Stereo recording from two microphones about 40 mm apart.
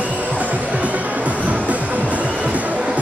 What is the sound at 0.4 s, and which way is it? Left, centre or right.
Music, right.